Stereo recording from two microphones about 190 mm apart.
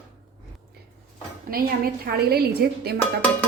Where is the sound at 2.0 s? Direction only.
55° right (ahead or behind).